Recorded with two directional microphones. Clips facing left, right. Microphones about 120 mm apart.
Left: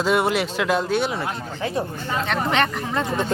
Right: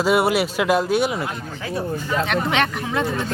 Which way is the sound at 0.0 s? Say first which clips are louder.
Right 2 dB; 10° right (ahead or behind).